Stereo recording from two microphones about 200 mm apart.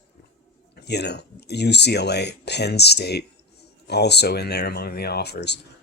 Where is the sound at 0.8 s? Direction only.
55° left (ahead or behind).